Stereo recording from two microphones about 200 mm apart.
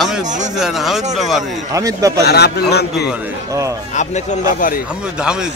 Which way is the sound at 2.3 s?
55° left (ahead or behind).